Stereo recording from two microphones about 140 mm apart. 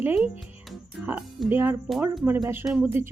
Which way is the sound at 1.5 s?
15° right (ahead or behind).